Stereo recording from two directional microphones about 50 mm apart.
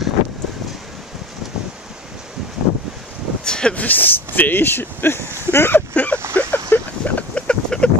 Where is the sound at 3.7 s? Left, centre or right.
Left.